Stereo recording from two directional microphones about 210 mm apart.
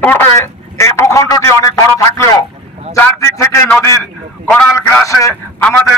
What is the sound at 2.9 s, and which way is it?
A man's voice, 10° left (ahead or behind).